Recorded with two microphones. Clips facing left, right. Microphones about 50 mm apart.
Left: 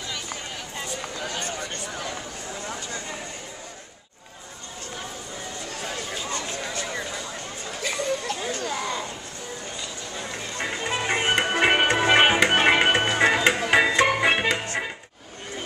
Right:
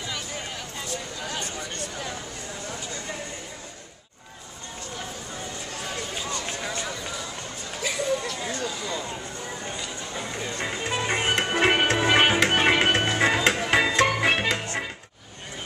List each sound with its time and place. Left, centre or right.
7.8 s chatter: centre
8.5 s a sound: left
10.6 s music: centre